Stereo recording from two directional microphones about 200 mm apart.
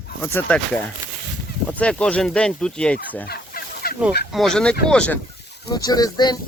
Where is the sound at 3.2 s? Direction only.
50° left (ahead or behind).